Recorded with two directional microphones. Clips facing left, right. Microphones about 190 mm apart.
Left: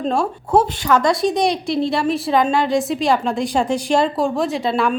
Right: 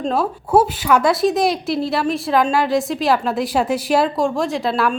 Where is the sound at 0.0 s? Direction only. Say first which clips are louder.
Even; 5° right (ahead or behind).